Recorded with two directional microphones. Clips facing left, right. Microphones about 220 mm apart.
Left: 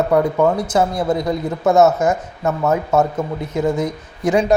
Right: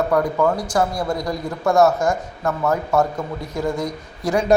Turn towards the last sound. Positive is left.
turn(degrees=20)  # may be behind; listen again after turning